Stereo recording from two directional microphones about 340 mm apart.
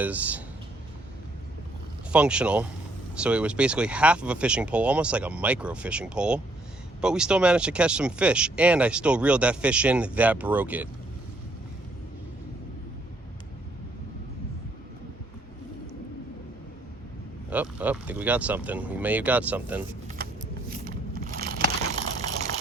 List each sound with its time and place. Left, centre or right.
0.0 s speech: centre
2.1 s speech: centre
17.5 s speech: centre
20.2 s shuffling cards: right
20.8 s crumpling: right